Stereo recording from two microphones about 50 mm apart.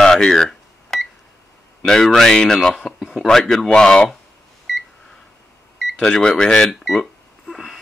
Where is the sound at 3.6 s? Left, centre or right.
Centre.